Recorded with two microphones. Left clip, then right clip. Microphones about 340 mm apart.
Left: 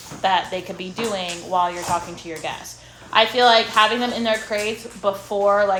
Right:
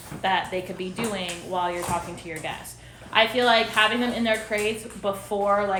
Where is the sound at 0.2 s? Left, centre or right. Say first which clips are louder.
Left 4 dB; centre.